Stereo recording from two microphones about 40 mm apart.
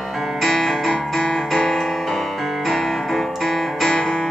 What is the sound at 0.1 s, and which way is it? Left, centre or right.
Music, centre.